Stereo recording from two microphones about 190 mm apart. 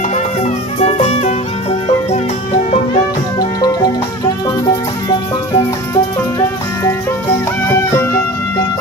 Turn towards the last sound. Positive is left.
turn(degrees=15)  # may be behind; listen again after turning